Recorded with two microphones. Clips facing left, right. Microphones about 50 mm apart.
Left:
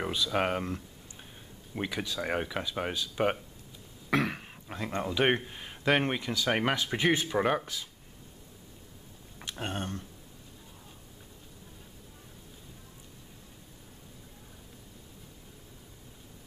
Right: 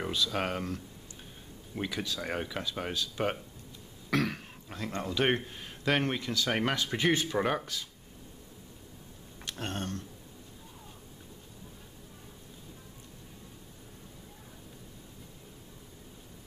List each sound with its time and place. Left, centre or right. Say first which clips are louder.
0.0 s speech: left 2 dB; centre
9.4 s speech: left 1 dB; centre